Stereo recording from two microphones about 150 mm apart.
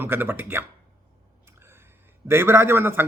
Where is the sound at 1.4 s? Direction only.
15° right (ahead or behind).